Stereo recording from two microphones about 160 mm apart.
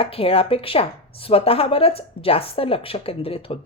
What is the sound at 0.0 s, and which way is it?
A woman's voice, 35° left (ahead or behind).